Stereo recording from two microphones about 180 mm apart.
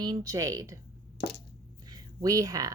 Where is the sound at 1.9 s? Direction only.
20° right (ahead or behind).